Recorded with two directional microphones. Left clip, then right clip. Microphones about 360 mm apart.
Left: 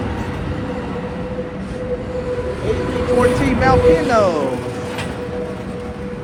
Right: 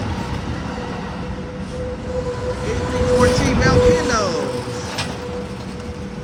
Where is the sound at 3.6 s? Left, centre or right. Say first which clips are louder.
Left 3 dB; centre.